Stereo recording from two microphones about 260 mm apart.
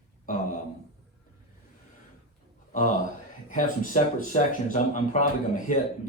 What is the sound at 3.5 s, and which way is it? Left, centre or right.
Speech, left.